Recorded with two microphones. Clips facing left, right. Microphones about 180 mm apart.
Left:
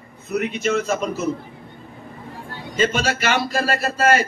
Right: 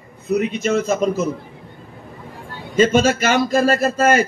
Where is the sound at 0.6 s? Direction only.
45° right (ahead or behind).